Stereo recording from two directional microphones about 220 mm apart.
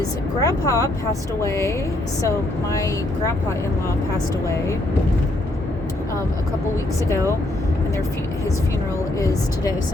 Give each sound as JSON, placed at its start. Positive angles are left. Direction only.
{"t": 0.3, "sound": "speech", "side_deg": 15}
{"t": 9.1, "sound": "speech", "side_deg": 15}